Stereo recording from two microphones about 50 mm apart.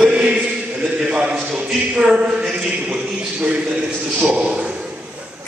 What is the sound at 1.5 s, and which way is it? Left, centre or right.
A man's voice, centre.